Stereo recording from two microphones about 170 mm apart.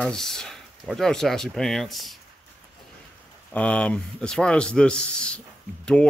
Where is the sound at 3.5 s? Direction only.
5° left (ahead or behind).